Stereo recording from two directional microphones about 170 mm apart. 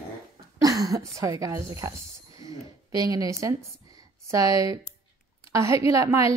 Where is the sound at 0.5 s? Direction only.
20° right (ahead or behind).